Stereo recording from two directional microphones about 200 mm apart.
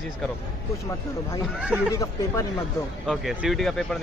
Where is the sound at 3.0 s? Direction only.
Centre (ahead or behind).